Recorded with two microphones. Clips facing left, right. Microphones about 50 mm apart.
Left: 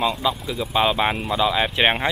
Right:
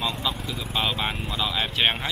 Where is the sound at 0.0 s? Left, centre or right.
Centre.